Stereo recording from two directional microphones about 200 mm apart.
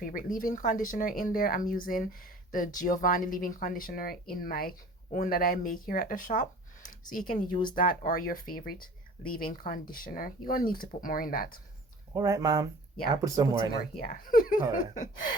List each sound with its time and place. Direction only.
0.0 s speech: 45° left (ahead or behind)
12.1 s speech: 15° right (ahead or behind)
14.0 s speech: 45° left (ahead or behind)